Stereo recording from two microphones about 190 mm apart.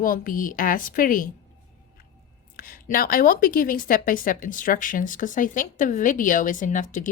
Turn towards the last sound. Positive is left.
turn(degrees=40)  # may be behind; listen again after turning